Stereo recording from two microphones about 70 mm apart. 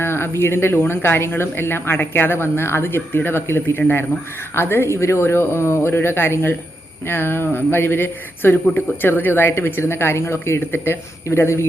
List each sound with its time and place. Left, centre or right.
0.0 s speech: left